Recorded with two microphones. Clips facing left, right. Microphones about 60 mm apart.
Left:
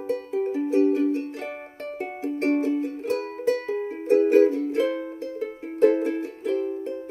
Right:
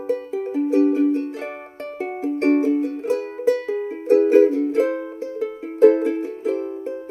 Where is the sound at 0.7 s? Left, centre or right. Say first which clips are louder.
Right 4 dB; right.